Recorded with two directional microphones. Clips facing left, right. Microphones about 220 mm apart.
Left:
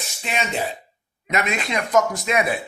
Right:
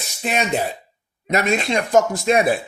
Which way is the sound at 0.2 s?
40° right (ahead or behind).